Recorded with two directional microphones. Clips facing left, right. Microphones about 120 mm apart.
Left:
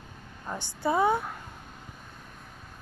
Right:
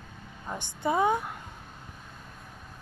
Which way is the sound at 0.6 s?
20° right (ahead or behind).